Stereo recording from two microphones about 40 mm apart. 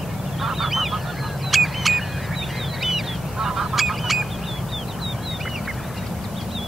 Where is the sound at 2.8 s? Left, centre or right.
Centre.